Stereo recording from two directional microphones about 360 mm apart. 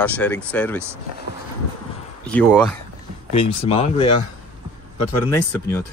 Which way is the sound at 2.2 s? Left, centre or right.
Centre.